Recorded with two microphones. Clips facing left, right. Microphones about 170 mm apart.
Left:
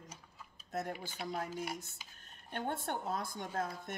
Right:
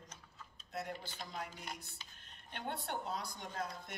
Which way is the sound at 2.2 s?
45° left (ahead or behind).